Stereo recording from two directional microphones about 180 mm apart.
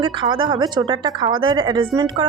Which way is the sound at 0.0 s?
25° right (ahead or behind).